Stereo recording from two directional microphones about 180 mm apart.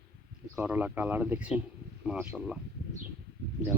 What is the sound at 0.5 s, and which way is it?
Speech, 10° right (ahead or behind).